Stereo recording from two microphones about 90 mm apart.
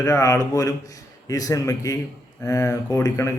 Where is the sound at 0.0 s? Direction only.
40° left (ahead or behind).